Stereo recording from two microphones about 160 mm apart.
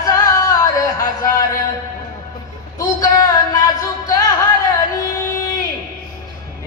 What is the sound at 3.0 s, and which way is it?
Speech, 25° left (ahead or behind).